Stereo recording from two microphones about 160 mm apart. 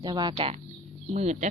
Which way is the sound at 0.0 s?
25° right (ahead or behind).